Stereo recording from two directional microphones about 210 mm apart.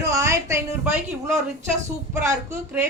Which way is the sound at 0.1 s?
15° right (ahead or behind).